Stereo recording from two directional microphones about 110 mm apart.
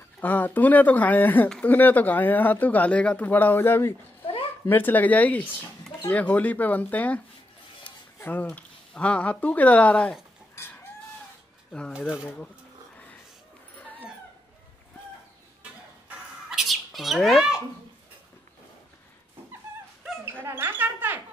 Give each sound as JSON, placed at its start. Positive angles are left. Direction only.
{"t": 0.2, "sound": "speech", "side_deg": 15}
{"t": 13.7, "sound": "dog", "side_deg": 15}
{"t": 16.4, "sound": "bird", "side_deg": -5}
{"t": 20.4, "sound": "a sound", "side_deg": -20}